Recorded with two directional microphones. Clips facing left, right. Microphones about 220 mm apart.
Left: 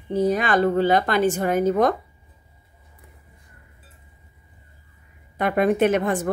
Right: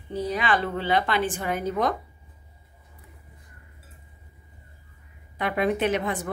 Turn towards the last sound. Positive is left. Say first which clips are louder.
# left 6 dB
turn(degrees=45)  # may be behind; listen again after turning